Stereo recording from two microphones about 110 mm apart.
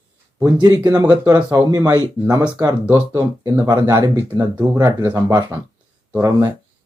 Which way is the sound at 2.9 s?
25° right (ahead or behind).